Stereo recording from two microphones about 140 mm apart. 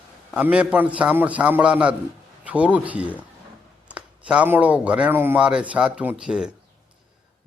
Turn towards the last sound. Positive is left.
turn(degrees=-5)  # may be behind; listen again after turning